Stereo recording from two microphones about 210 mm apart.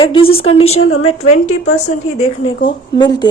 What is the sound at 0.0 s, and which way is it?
A woman's voice, 25° left (ahead or behind).